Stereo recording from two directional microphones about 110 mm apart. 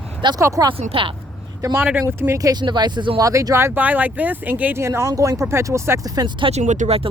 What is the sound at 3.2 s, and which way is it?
Speech, 30° right (ahead or behind).